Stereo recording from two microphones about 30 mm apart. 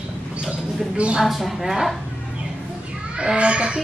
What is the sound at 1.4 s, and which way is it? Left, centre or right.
Speech, centre.